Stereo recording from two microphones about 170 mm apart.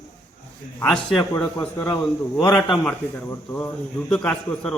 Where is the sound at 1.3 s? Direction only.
20° left (ahead or behind).